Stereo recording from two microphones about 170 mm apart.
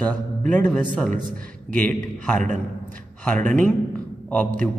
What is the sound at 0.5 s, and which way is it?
A man's voice, 10° left (ahead or behind).